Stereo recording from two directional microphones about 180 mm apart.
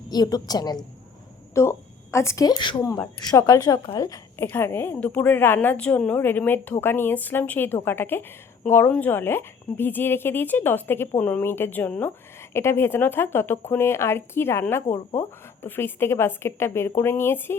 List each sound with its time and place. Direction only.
0.1 s a woman's voice: 20° left (ahead or behind)